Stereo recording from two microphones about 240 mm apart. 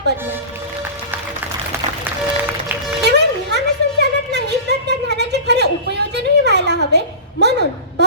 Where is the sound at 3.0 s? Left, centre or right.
Right.